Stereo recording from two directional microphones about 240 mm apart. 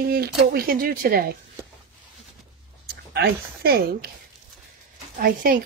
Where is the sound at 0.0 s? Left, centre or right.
Right.